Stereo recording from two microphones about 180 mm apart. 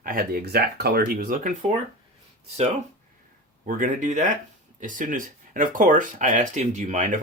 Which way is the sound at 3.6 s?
45° right (ahead or behind).